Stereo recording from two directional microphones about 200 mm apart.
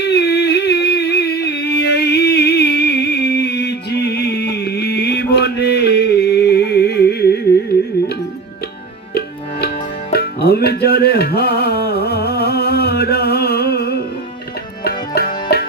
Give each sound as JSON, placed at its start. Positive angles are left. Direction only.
{"t": 0.0, "sound": "music", "side_deg": 55}
{"t": 9.1, "sound": "music", "side_deg": 50}